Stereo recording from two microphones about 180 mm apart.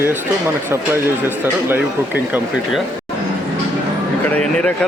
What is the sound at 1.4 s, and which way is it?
Speech, 10° right (ahead or behind).